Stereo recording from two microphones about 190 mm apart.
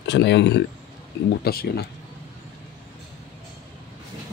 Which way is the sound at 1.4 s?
55° left (ahead or behind).